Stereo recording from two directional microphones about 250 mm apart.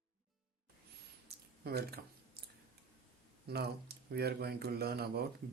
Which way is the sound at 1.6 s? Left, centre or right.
Right.